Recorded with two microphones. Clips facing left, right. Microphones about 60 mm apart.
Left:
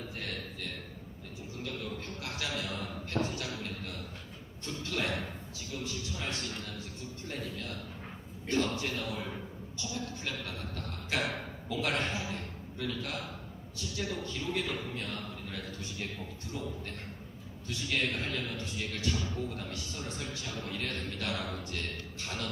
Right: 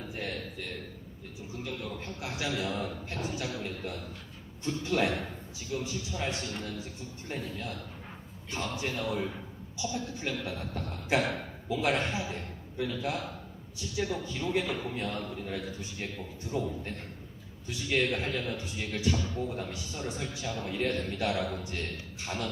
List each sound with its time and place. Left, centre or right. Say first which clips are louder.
1.6 s a sound: right 1 dB; centre
3.2 s a man's voice: right 3 dB; centre
8.5 s a man's voice: left 2 dB; right